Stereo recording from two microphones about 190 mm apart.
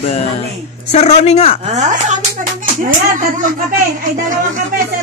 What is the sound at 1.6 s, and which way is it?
A woman's voice, 35° right (ahead or behind).